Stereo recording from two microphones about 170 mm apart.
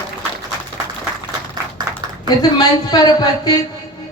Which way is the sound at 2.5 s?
25° left (ahead or behind).